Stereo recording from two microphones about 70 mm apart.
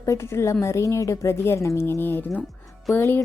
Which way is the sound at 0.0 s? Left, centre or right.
Left.